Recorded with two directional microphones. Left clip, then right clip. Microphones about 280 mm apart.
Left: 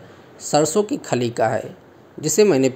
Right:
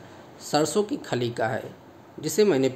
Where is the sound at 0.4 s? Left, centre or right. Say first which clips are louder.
Left 6 dB; centre.